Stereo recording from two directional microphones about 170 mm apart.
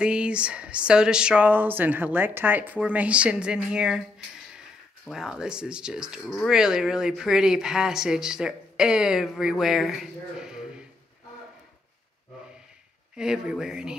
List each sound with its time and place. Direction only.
0.0 s speech: 5° right (ahead or behind)
13.1 s speech: 5° right (ahead or behind)